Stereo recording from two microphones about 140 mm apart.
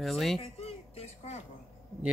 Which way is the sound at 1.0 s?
50° left (ahead or behind).